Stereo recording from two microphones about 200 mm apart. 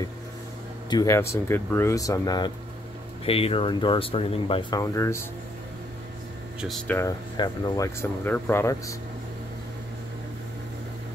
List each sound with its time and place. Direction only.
0.8 s speech: 15° left (ahead or behind)
6.6 s speech: centre (ahead or behind)
7.0 s speech: 20° left (ahead or behind)